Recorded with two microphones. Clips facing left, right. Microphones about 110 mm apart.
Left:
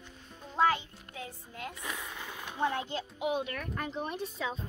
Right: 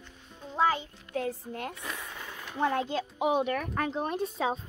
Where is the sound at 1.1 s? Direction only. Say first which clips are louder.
Right 11 dB; 60° right (ahead or behind).